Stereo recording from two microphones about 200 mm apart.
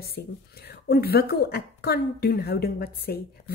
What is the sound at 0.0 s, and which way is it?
Speech, 50° left (ahead or behind).